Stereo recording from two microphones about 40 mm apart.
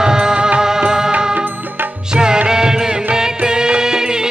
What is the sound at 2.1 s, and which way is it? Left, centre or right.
Music, right.